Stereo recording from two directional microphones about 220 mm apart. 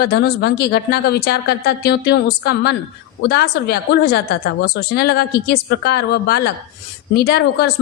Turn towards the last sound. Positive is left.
turn(degrees=45)  # may be behind; listen again after turning